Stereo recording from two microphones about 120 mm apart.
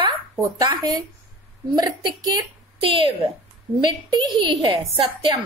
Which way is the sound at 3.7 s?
35° right (ahead or behind).